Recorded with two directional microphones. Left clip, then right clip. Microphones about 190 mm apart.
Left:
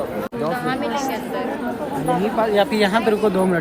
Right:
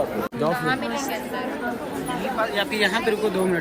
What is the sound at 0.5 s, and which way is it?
Chatter, 50° left (ahead or behind).